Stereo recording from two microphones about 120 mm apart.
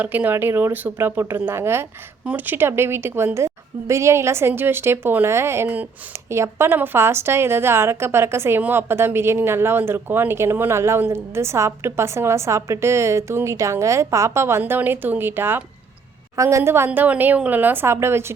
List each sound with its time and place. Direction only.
0.0 s a woman's voice: 15° right (ahead or behind)